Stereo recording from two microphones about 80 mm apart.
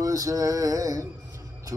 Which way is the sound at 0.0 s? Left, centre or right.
Right.